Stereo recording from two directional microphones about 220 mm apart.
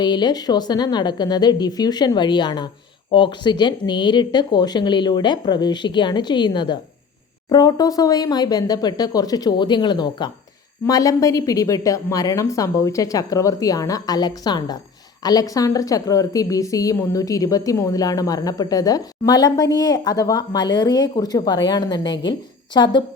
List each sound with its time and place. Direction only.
0.0 s a woman's voice: 20° left (ahead or behind)